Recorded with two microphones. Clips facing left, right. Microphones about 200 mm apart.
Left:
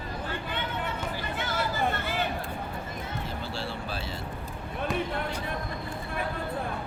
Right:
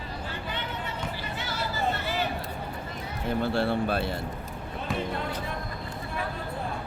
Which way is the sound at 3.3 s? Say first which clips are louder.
Right 9 dB; 55° right (ahead or behind).